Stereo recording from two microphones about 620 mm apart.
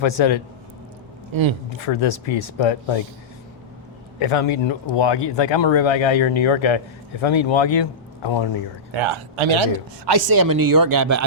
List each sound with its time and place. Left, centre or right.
0.0 s speech: left
1.3 s speech: right
1.8 s speech: left
4.2 s speech: left
8.9 s speech: right
10.1 s speech: right